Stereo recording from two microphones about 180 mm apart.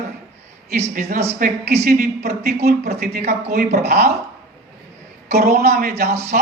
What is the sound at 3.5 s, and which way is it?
Speech, 55° right (ahead or behind).